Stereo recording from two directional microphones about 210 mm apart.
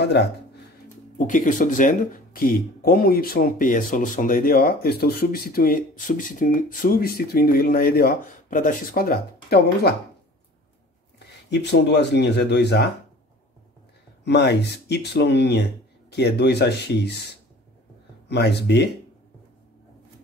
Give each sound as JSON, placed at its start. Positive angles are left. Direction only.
{"t": 1.1, "sound": "speech", "side_deg": 40}
{"t": 11.5, "sound": "speech", "side_deg": 55}
{"t": 14.2, "sound": "speech", "side_deg": 55}
{"t": 18.3, "sound": "speech", "side_deg": 55}